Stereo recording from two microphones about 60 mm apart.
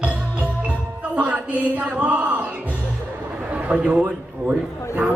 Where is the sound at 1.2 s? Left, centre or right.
Right.